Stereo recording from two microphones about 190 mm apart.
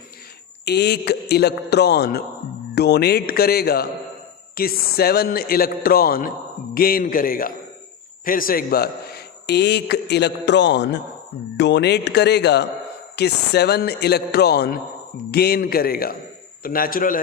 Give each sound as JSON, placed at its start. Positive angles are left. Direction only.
{"t": 0.6, "sound": "a man's voice", "side_deg": 60}